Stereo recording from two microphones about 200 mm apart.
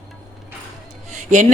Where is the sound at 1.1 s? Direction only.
35° right (ahead or behind).